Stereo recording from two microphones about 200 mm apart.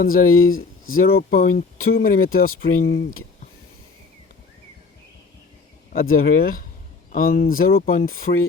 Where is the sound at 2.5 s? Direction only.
80° left.